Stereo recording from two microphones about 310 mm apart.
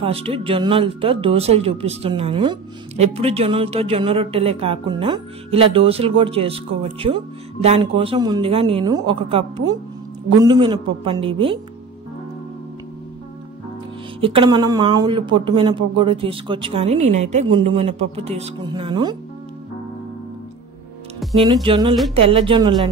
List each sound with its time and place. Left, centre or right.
0.0 s speech: centre
14.2 s a woman's voice: centre
21.4 s speech: centre